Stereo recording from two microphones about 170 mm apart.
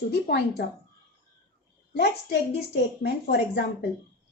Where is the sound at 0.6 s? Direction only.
70° left (ahead or behind).